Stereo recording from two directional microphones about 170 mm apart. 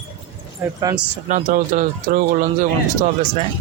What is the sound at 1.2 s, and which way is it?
Speech, 50° right (ahead or behind).